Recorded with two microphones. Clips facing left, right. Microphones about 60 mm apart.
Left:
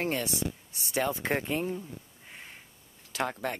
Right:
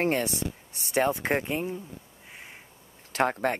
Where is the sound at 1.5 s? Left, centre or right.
Centre.